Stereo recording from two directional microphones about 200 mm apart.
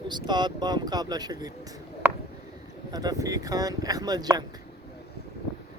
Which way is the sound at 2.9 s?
20° right (ahead or behind).